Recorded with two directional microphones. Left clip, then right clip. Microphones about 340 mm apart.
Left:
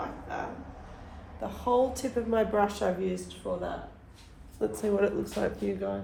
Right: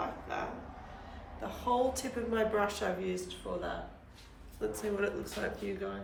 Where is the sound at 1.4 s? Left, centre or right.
Centre.